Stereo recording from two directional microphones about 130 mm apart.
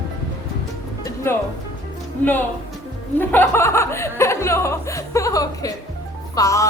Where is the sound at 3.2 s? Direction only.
15° left (ahead or behind).